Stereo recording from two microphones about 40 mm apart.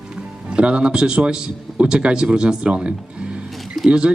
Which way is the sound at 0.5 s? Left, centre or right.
Right.